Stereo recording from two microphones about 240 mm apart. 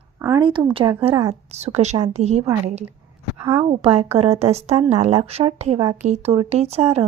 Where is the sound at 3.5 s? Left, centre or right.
Right.